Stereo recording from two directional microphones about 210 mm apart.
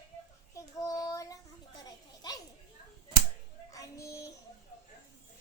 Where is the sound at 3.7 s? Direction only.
15° left (ahead or behind).